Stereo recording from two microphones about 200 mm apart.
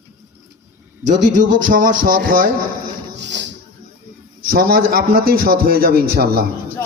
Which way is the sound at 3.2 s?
60° right (ahead or behind).